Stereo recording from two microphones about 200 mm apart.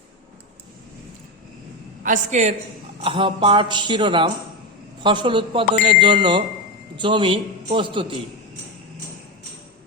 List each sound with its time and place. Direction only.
2.0 s a man's voice: 35° right (ahead or behind)
3.0 s speech: 25° right (ahead or behind)